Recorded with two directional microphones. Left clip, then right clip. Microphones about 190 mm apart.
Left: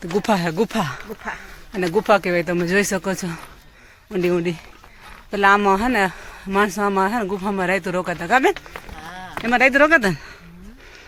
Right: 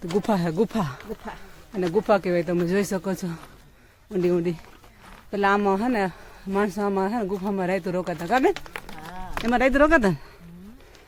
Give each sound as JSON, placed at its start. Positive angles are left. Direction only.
{"t": 0.2, "sound": "speech", "side_deg": -10}
{"t": 1.7, "sound": "speech", "side_deg": 5}
{"t": 9.4, "sound": "speech", "side_deg": -15}